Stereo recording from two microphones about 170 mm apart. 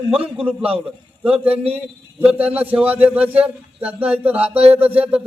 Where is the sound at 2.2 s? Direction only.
10° right (ahead or behind).